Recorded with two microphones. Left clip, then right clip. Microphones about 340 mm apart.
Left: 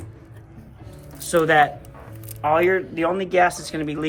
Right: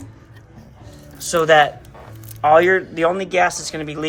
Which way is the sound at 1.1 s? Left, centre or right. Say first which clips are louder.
Right 3 dB; centre.